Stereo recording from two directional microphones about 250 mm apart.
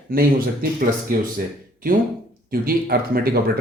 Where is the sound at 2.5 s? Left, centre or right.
Right.